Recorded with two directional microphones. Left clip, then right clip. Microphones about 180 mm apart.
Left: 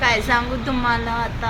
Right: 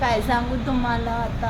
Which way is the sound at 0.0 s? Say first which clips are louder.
Left 3 dB; 15° right (ahead or behind).